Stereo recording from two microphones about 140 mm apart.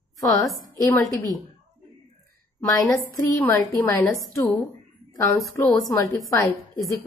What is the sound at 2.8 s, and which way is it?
A woman's voice, 15° left (ahead or behind).